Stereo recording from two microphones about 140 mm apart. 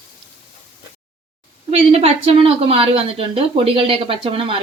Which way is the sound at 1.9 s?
45° right (ahead or behind).